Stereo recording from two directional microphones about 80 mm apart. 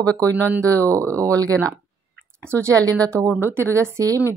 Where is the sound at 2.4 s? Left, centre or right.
Right.